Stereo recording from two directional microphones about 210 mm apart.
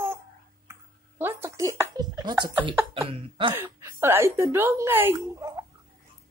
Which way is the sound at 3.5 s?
15° right (ahead or behind).